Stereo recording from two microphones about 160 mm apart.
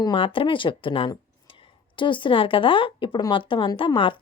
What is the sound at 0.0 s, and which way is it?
Speech, 30° left (ahead or behind).